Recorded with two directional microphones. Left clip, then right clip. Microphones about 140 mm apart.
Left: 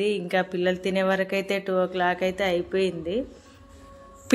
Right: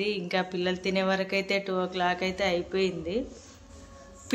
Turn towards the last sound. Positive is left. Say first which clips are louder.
# left 3 dB
turn(degrees=20)  # may be behind; listen again after turning